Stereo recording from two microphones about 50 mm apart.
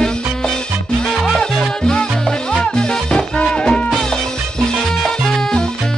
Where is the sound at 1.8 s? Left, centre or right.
Centre.